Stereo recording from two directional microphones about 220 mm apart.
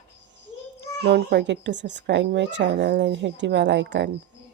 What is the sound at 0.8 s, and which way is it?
A child's voice, 50° right (ahead or behind).